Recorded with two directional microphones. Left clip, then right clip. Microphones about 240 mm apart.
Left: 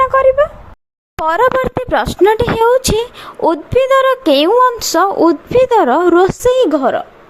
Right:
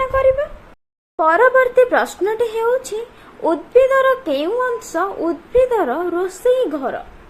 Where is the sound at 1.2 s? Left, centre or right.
Left.